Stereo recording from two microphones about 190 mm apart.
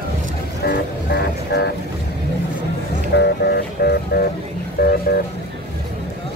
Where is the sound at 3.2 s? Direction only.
55° left (ahead or behind).